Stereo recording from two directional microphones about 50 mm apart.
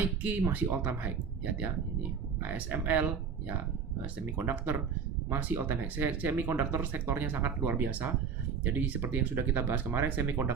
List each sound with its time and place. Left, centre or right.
0.0 s speech: right
2.4 s speech: right
4.4 s speech: right